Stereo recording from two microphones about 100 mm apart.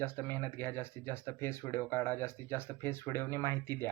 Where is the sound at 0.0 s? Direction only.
25° left (ahead or behind).